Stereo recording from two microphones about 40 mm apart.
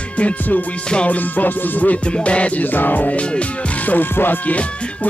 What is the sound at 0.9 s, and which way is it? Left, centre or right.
Music, left.